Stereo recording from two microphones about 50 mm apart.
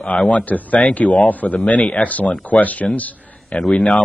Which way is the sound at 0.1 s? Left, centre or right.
Left.